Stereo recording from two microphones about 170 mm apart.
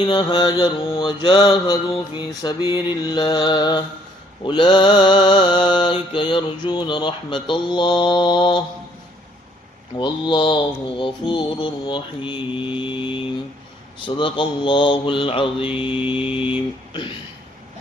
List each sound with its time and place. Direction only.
0.0 s mantra: 25° left (ahead or behind)
9.9 s mantra: 30° left (ahead or behind)